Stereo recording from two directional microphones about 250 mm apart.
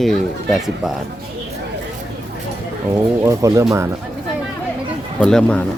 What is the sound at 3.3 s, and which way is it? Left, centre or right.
Speech, centre.